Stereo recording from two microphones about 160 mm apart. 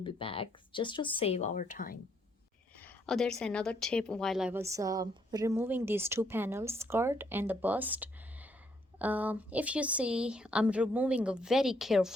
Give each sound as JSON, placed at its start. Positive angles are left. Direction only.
{"t": 0.0, "sound": "speech", "side_deg": 35}
{"t": 2.7, "sound": "a woman's voice", "side_deg": 10}
{"t": 4.5, "sound": "speech", "side_deg": -20}